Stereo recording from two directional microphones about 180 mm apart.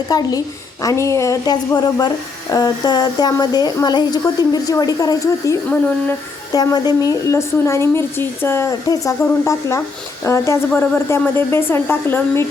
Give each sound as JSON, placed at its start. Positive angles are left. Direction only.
{"t": 0.1, "sound": "a woman's voice", "side_deg": 20}